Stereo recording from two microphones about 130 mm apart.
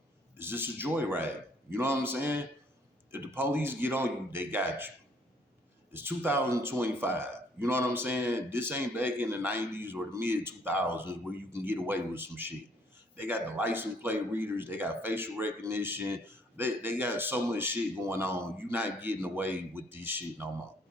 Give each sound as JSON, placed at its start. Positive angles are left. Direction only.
{"t": 0.3, "sound": "a man's voice", "side_deg": -15}
{"t": 5.9, "sound": "a man's voice", "side_deg": -15}